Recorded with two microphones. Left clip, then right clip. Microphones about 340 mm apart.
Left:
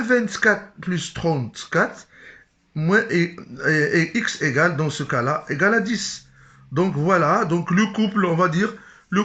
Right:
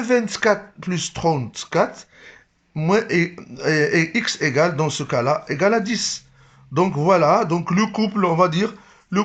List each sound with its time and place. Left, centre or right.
0.0 s speech: centre